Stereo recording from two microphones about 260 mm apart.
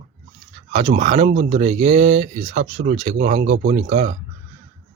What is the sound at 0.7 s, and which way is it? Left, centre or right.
Speech, right.